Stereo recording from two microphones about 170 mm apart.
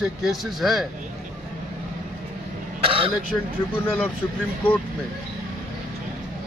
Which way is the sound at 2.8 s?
30° right (ahead or behind).